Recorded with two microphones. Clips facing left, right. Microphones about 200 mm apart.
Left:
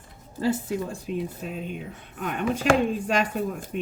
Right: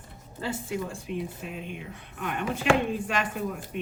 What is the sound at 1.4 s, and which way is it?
Speech, 40° left (ahead or behind).